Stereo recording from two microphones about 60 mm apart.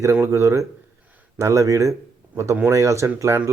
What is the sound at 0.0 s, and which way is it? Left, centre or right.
Speech, right.